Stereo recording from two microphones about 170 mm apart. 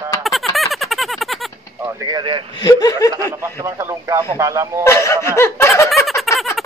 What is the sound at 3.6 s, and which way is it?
Speech, 15° right (ahead or behind).